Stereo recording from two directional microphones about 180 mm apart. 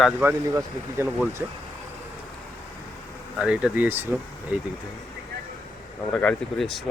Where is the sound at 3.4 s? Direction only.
5° right (ahead or behind).